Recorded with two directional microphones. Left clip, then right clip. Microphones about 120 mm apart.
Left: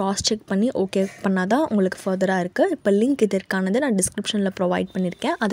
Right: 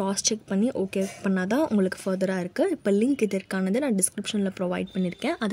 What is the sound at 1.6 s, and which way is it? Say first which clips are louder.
A woman's voice: left 3 dB; 30° left (ahead or behind).